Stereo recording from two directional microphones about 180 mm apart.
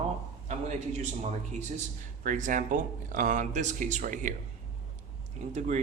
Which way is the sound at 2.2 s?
45° right (ahead or behind).